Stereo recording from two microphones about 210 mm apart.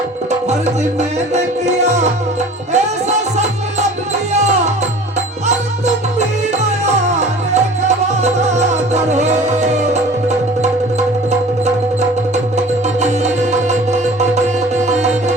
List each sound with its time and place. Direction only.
0.9 s music: 30° right (ahead or behind)
5.5 s music: 35° right (ahead or behind)
12.5 s music: 35° right (ahead or behind)
14.8 s music: 35° right (ahead or behind)